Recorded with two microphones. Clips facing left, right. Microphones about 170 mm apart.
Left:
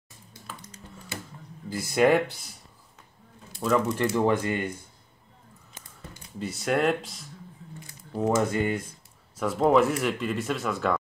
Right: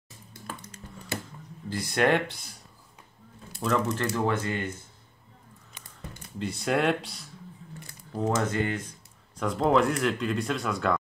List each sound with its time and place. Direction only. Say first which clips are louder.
0.3 s a sound: right 3 dB; 60° right (ahead or behind)
1.7 s speech: left 3 dB; 5° left (ahead or behind)
3.9 s speech: left 4 dB; 15° left (ahead or behind)
6.4 s speech: left 1 dB; centre (ahead or behind)
8.1 s speech: left 3 dB; 10° left (ahead or behind)